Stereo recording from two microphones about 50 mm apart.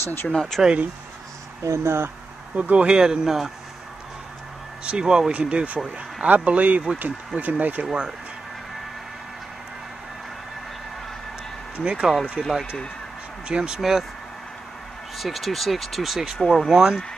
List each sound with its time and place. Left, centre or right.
0.0 s speech: left
0.6 s speech: centre
1.6 s speech: right
2.5 s speech: right
3.0 s speech: centre
4.8 s speech: centre; by 7.8 s right
7.8 s speech: centre
11.7 s speech: centre
12.1 s speech: centre
13.5 s speech: centre
15.1 s speech: centre
16.7 s speech: centre